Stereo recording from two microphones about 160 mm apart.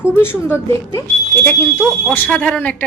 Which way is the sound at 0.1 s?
15° left (ahead or behind).